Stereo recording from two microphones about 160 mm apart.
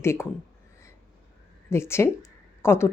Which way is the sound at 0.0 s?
15° left (ahead or behind).